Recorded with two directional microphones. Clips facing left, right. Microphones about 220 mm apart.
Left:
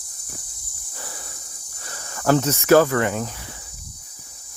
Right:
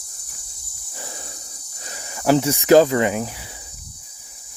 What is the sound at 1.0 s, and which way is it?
Cricket, 20° right (ahead or behind).